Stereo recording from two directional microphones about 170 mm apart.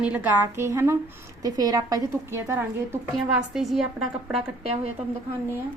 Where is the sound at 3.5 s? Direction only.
Centre (ahead or behind).